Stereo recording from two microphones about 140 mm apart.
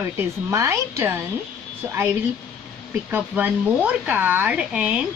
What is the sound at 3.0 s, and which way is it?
Speech, 10° right (ahead or behind).